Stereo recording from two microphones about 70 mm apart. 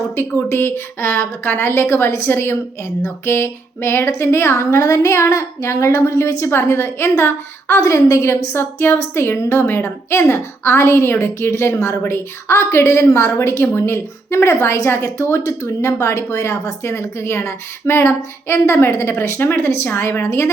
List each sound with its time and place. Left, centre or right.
0.2 s a woman's voice: left